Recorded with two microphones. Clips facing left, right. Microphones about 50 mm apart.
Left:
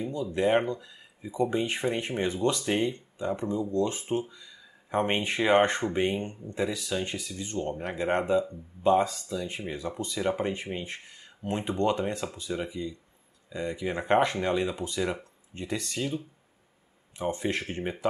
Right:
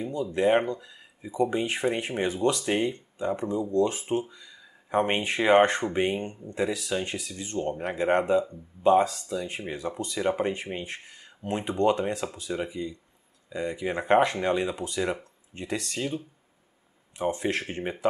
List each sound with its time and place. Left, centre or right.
0.0 s speech: centre
8.4 s speech: centre
16.0 s speech: centre